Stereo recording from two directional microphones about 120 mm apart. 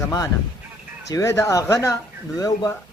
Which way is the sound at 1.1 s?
25° left (ahead or behind).